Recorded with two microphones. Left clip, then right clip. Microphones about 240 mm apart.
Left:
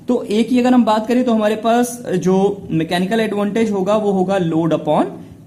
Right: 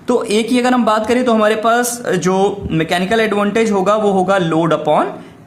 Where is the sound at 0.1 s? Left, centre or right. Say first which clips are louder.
Right 3 dB; right.